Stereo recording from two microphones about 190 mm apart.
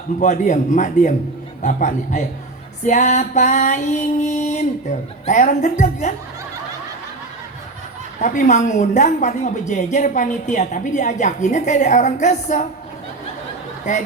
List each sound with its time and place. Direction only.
0.2 s a woman's voice: 40° left (ahead or behind)
8.2 s a woman's voice: 40° left (ahead or behind)
13.9 s a woman's voice: 40° left (ahead or behind)